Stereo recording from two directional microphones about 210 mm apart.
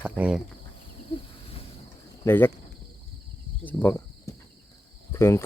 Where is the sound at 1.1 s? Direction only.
25° left (ahead or behind).